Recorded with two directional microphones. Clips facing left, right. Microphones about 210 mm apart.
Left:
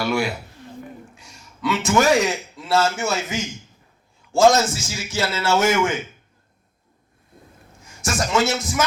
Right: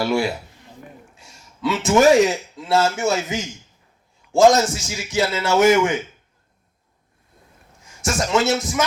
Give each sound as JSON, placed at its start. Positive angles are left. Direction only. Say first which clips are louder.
{"t": 0.0, "sound": "a man's voice", "louder": "right 2 dB", "side_deg": -25}
{"t": 1.6, "sound": "a man's voice", "louder": "right 4 dB", "side_deg": -25}
{"t": 8.0, "sound": "a man's voice", "louder": "right 1 dB", "side_deg": -20}